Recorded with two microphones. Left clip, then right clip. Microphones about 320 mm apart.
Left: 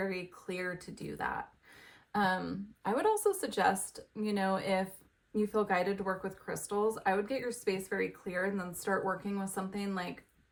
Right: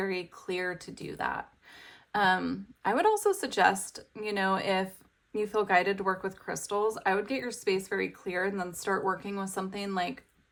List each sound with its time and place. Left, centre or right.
0.0 s speech: centre
2.1 s speech: centre